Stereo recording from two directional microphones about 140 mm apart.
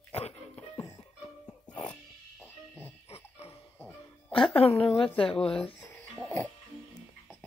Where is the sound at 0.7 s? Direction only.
25° left (ahead or behind).